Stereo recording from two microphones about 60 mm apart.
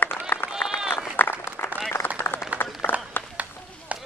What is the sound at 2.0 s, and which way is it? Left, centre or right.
Run, left.